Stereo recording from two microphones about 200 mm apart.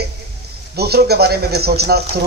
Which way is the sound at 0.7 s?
55° right (ahead or behind).